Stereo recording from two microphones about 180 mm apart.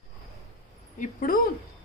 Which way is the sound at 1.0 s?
50° left (ahead or behind).